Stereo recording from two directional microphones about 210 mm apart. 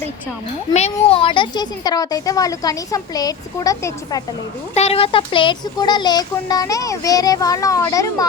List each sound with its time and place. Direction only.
0.7 s a child's voice: 30° left (ahead or behind); by 4.2 s 15° left (ahead or behind)
4.7 s a child's voice: 30° left (ahead or behind); by 8.3 s 15° left (ahead or behind)